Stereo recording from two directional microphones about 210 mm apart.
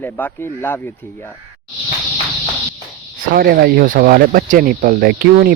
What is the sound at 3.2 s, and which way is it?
Speech, 45° right (ahead or behind).